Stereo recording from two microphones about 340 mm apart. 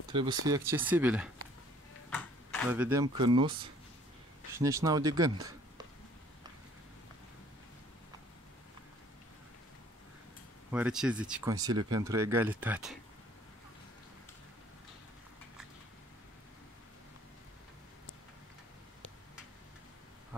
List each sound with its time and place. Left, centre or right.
0.1 s speech: centre
4.6 s speech: centre
10.7 s speech: centre